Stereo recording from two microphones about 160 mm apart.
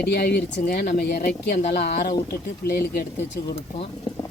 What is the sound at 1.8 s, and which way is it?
Speech, 70° left (ahead or behind).